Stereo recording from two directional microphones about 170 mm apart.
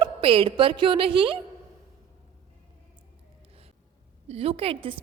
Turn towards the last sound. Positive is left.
turn(degrees=-35)  # may be behind; listen again after turning